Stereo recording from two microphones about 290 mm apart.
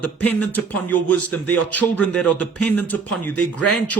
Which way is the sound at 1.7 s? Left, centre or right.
Centre.